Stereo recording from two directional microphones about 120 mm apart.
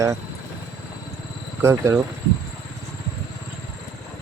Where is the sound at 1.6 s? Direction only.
20° right (ahead or behind).